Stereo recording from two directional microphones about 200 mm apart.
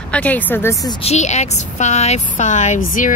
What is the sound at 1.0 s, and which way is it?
A woman's voice, 35° left (ahead or behind).